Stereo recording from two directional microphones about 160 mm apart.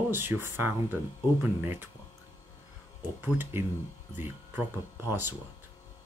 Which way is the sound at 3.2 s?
15° right (ahead or behind).